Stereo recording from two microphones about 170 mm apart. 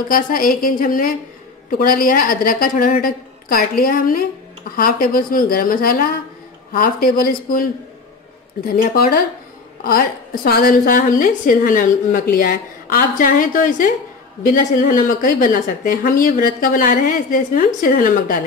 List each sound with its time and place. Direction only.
0.1 s a woman's voice: 55° left (ahead or behind)
8.8 s a woman's voice: 65° left (ahead or behind)